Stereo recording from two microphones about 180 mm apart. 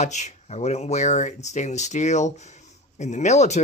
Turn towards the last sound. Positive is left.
turn(degrees=40)  # may be behind; listen again after turning